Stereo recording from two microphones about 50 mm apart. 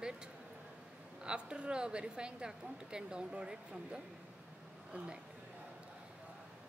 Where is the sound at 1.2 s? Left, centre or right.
Centre.